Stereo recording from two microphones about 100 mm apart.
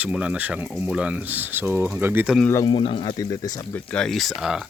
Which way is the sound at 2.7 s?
60° left (ahead or behind).